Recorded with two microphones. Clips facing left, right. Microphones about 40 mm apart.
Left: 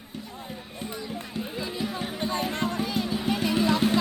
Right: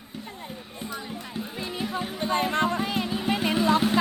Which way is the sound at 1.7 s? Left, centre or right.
Centre.